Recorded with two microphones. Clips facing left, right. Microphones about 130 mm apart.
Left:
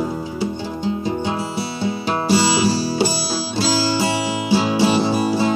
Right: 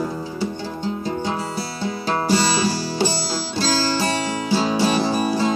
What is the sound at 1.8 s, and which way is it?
Music, 15° left (ahead or behind).